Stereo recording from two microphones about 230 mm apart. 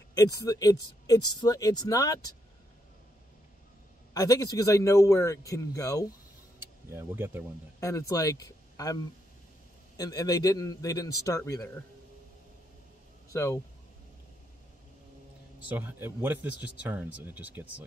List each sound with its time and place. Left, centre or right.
0.1 s speech: centre
4.1 s speech: centre
6.9 s speech: centre
7.8 s speech: centre
13.3 s speech: centre
15.7 s speech: centre